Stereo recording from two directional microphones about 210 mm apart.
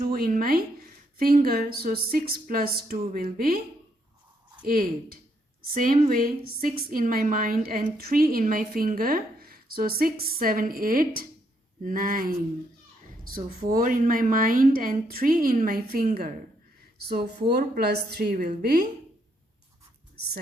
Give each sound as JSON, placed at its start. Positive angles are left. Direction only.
{"t": 0.0, "sound": "a woman's voice", "side_deg": -45}
{"t": 4.6, "sound": "a woman's voice", "side_deg": -40}
{"t": 17.5, "sound": "a woman's voice", "side_deg": -50}